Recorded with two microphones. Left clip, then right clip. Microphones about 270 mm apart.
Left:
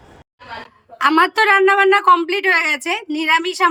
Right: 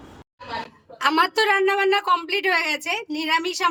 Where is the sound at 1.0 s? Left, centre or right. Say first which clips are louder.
Left 6 dB; centre.